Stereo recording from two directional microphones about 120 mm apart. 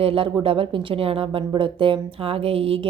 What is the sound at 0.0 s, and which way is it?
Speech, 50° right (ahead or behind).